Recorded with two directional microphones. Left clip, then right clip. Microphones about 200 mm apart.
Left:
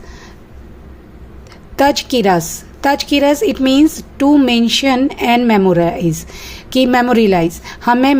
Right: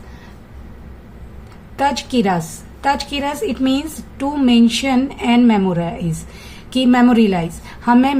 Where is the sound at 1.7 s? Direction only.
40° left (ahead or behind).